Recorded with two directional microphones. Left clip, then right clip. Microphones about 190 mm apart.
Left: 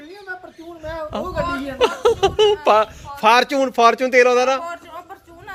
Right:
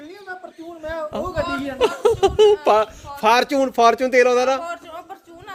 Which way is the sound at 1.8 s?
5° right (ahead or behind).